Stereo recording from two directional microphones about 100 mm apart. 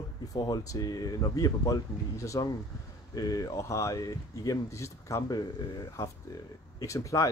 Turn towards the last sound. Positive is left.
turn(degrees=30)  # may be behind; listen again after turning